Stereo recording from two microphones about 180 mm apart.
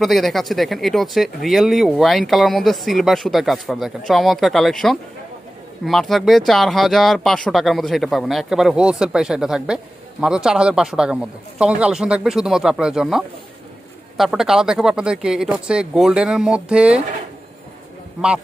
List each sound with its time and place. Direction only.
0.0 s speech: centre (ahead or behind)